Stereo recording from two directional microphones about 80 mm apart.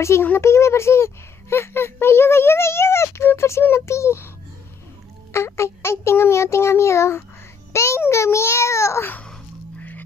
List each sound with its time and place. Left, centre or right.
0.0 s speech: left
5.3 s speech: left
9.8 s music: left